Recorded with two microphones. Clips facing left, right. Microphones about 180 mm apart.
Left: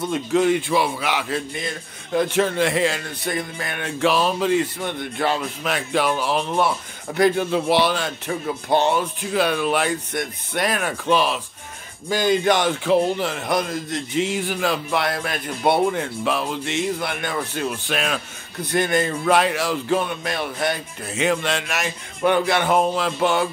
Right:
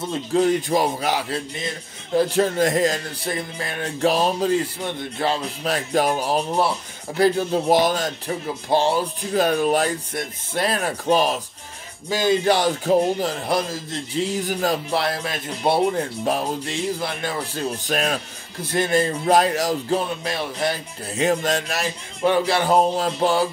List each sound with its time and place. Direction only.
0.1 s speech: 35° right (ahead or behind)
3.3 s speech: 30° right (ahead or behind)
12.1 s speech: 25° right (ahead or behind)